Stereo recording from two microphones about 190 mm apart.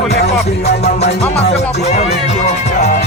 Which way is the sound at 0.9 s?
35° left (ahead or behind).